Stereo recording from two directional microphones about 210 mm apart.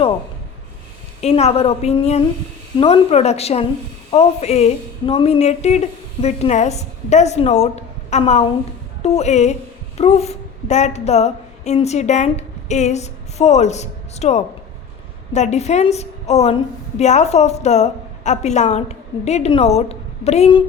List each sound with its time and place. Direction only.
1.2 s a woman's voice: 30° left (ahead or behind)